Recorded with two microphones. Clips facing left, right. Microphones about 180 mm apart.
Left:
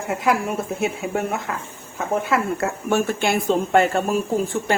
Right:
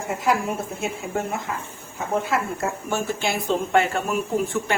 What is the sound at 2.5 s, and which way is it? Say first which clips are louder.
A woman's voice: left 5 dB; 60° left (ahead or behind).